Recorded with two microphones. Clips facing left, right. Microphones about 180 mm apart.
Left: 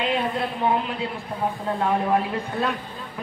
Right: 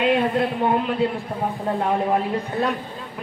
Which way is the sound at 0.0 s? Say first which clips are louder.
Right 5 dB; 50° right (ahead or behind).